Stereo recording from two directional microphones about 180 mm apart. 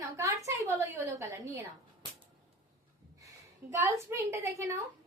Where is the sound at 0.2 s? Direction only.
15° right (ahead or behind).